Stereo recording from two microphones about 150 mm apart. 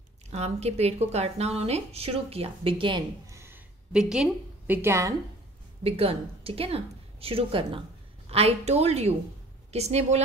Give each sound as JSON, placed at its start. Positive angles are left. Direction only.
{"t": 0.3, "sound": "a woman's voice", "side_deg": -45}
{"t": 3.3, "sound": "a sound", "side_deg": -15}
{"t": 3.9, "sound": "a woman's voice", "side_deg": -5}
{"t": 5.9, "sound": "a woman's voice", "side_deg": -40}